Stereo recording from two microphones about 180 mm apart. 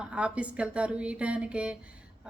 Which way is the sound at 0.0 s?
5° right (ahead or behind).